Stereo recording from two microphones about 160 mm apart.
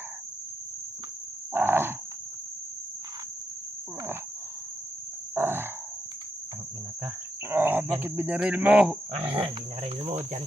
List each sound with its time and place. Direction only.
1.5 s wild animals: 15° right (ahead or behind)
5.3 s a sound: 15° right (ahead or behind)
7.5 s cricket: 15° right (ahead or behind)
9.4 s speech: 40° right (ahead or behind)